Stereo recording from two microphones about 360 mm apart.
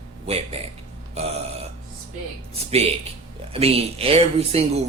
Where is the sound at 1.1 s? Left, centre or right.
Centre.